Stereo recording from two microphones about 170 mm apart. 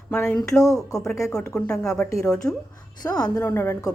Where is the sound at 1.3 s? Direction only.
5° left (ahead or behind).